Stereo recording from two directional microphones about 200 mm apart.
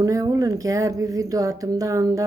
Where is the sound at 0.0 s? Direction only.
20° right (ahead or behind).